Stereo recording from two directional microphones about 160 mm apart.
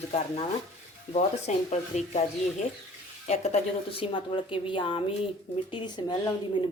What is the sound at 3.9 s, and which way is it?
A woman's voice, 35° left (ahead or behind).